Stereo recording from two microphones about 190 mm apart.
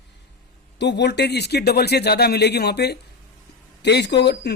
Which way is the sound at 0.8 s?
65° left (ahead or behind).